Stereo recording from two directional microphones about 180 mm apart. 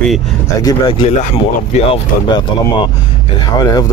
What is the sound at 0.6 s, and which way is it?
Speech, 25° left (ahead or behind).